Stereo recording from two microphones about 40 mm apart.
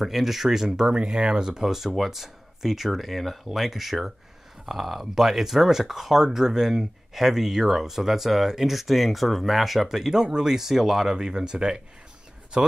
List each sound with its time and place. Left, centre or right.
0.0 s speech: centre
1.6 s speech: centre
11.1 s speech: centre